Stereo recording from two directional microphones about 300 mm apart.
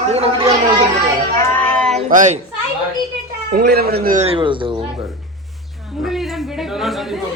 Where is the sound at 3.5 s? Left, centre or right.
Right; by 4.8 s centre.